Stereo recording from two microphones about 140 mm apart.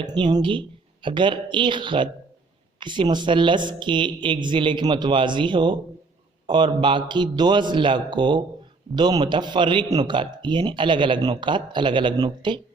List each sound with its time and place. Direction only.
0.0 s a man's voice: 30° right (ahead or behind)